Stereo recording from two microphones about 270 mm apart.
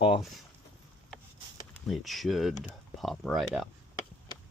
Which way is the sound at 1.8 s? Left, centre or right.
Centre.